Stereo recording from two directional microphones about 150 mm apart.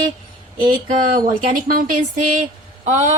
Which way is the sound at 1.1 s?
70° right (ahead or behind).